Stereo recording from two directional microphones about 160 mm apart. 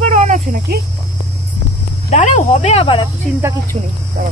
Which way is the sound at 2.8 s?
30° left (ahead or behind).